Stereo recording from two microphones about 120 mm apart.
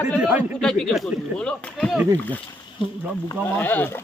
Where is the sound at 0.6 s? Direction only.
5° left (ahead or behind).